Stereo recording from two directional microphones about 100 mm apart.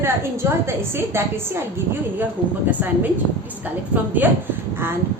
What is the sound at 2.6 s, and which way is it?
Speech, 20° right (ahead or behind).